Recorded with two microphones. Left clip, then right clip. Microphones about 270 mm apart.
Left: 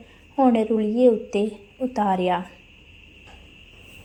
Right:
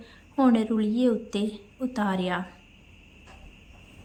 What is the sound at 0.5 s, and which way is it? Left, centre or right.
Speech, right.